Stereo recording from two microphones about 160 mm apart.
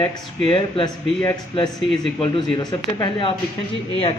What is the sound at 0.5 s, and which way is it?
Speech, 30° left (ahead or behind).